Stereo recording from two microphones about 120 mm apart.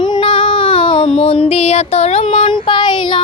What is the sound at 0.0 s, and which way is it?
Child singing, 45° left (ahead or behind).